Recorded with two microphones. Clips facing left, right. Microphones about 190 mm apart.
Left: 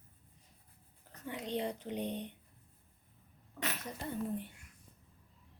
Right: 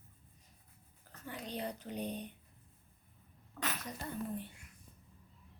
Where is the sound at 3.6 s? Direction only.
25° left (ahead or behind).